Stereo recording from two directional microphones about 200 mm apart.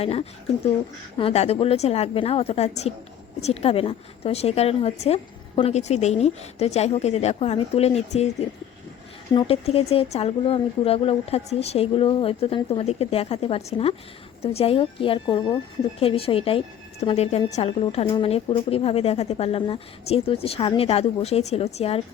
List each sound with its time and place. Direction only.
0.0 s a woman's voice: 30° left (ahead or behind)